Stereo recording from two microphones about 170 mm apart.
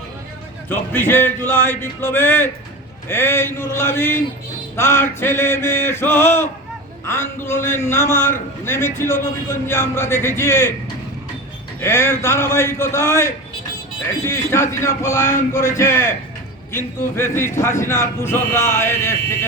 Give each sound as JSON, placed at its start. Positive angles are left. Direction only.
{"t": 0.7, "sound": "a man's voice", "side_deg": 10}
{"t": 11.8, "sound": "a man's voice", "side_deg": 15}